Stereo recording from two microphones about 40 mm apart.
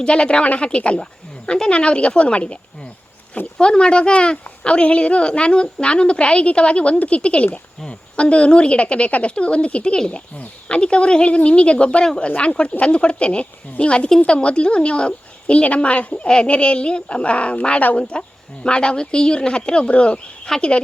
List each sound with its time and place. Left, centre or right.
0.0 s a woman's voice: left
3.6 s a woman's voice: left